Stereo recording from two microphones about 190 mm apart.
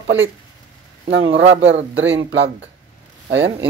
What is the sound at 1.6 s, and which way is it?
Speech, 75° right (ahead or behind).